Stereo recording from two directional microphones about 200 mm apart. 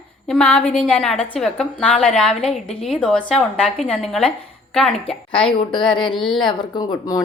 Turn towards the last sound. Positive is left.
turn(degrees=15)  # may be behind; listen again after turning